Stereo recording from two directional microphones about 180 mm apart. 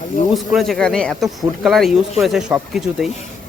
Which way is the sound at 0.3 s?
Centre (ahead or behind).